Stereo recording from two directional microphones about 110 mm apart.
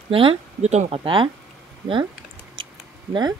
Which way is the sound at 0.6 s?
85° right.